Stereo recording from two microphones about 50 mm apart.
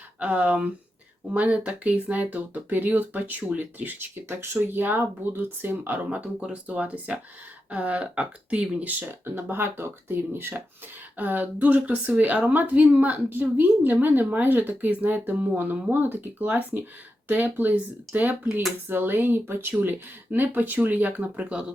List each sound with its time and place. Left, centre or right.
0.2 s a woman's voice: right
4.1 s speech: right
6.5 s speech: right
8.9 s a woman's voice: right
9.3 s a woman's voice: right
18.9 s a woman's voice: right
21.3 s speech: centre